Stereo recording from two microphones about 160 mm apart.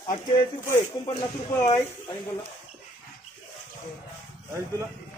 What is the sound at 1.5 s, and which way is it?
Speech, 20° left (ahead or behind).